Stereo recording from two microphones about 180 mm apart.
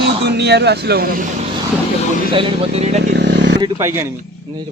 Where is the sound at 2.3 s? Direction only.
35° right (ahead or behind).